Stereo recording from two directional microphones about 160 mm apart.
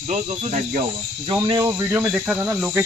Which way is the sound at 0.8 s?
30° right (ahead or behind).